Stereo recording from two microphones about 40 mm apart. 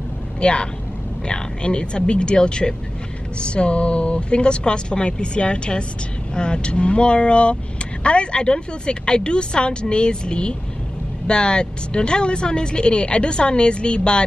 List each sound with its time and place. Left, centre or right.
0.4 s a woman's voice: left